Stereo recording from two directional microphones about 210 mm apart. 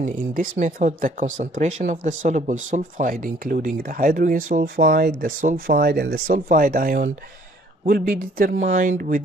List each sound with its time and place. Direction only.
0.0 s speech: 40° right (ahead or behind)